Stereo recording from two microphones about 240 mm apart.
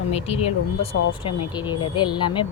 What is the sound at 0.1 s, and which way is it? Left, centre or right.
Speech, left.